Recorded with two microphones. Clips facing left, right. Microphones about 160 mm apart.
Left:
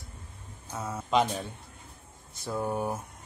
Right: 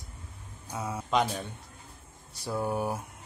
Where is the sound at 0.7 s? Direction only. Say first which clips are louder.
Right 1 dB; 10° right (ahead or behind).